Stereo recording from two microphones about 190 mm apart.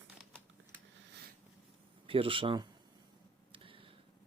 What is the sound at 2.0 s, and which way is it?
Speech, 30° right (ahead or behind).